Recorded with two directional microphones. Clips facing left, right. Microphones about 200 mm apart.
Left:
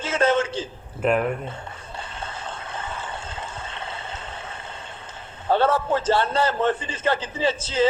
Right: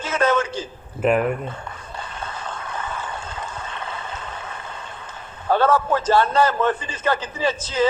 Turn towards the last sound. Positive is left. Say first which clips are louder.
# even
turn(degrees=30)  # may be behind; listen again after turning